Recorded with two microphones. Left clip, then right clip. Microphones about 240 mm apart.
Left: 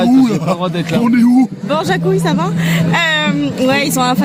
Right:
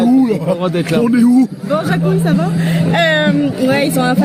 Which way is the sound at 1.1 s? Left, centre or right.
Centre.